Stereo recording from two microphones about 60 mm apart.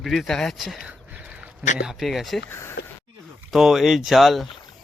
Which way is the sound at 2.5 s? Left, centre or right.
Left.